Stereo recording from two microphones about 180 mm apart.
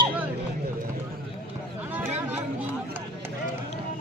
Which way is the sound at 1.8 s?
10° right (ahead or behind).